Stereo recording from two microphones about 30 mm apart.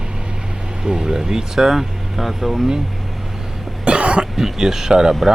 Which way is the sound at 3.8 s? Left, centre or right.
Right.